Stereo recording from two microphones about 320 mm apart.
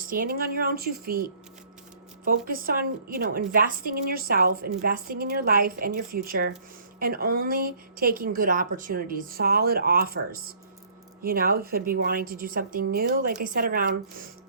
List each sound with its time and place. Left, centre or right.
0.1 s a woman's voice: right